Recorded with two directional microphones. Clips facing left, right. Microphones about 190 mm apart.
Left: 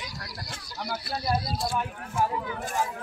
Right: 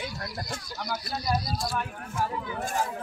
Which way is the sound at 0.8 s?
30° left (ahead or behind).